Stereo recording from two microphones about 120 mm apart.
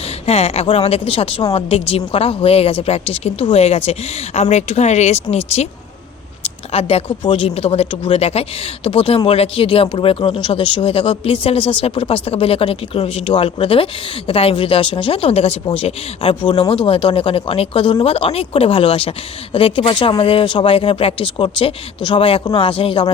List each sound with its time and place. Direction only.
0.3 s a woman's voice: 60° left (ahead or behind)